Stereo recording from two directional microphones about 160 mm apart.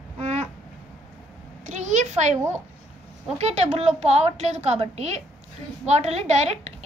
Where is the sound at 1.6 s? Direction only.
50° right (ahead or behind).